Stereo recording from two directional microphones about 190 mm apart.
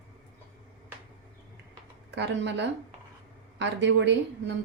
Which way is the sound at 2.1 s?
65° right (ahead or behind).